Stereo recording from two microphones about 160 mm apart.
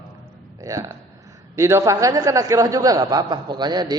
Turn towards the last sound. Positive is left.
turn(degrees=-25)  # may be behind; listen again after turning